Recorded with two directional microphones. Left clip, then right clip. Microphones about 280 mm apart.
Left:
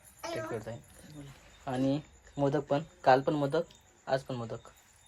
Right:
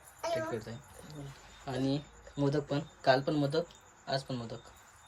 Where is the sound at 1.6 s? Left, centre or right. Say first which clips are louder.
Left 3 dB; centre.